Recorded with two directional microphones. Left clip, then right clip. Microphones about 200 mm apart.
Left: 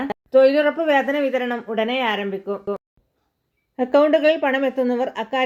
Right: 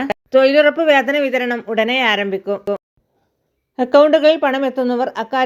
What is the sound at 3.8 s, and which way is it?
A woman's voice, 30° right (ahead or behind).